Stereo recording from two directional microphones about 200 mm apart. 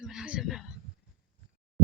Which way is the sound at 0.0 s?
5° right (ahead or behind).